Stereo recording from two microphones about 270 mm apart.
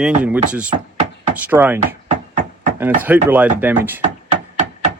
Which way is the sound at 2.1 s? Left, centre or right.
Right.